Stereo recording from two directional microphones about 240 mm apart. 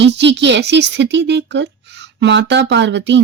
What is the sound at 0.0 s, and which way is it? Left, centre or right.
Speech, right.